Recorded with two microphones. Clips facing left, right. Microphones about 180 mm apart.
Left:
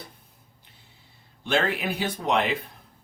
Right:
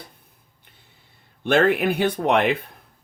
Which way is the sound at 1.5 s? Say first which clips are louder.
Right 7 dB; 55° right (ahead or behind).